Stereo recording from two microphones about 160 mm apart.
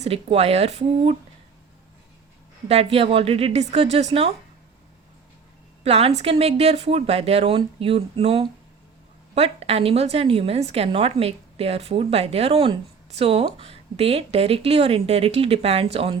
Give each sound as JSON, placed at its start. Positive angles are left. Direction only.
{"t": 0.0, "sound": "a woman's voice", "side_deg": -40}
{"t": 2.6, "sound": "a woman's voice", "side_deg": -40}
{"t": 5.8, "sound": "a woman's voice", "side_deg": -40}